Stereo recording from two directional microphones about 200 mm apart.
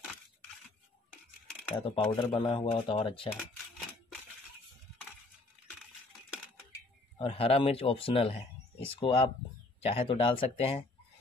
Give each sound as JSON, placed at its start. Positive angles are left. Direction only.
{"t": 1.8, "sound": "speech", "side_deg": 25}
{"t": 7.2, "sound": "speech", "side_deg": 30}